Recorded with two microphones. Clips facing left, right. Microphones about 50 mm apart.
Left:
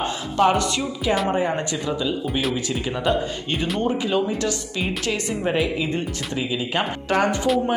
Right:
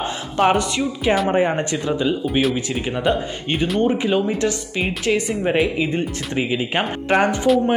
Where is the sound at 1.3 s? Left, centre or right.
Right.